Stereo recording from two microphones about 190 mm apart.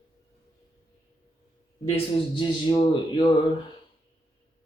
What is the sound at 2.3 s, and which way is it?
Speech, 25° left (ahead or behind).